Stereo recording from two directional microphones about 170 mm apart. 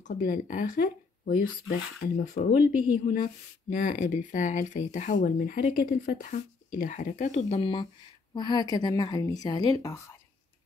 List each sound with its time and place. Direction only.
0.0 s speech: 55° left (ahead or behind)
3.7 s a woman's voice: 50° left (ahead or behind); by 10.1 s 20° left (ahead or behind)